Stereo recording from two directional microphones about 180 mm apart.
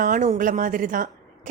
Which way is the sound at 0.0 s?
45° right (ahead or behind).